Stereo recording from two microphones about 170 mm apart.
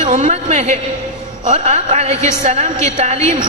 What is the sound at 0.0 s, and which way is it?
A woman's voice, 45° right (ahead or behind).